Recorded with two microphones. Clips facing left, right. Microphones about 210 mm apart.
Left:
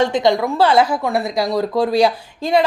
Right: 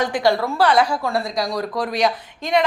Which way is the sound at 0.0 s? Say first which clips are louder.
Left 3 dB; 20° left (ahead or behind).